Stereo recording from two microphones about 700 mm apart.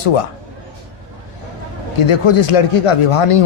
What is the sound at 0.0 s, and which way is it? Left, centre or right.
Speech, left.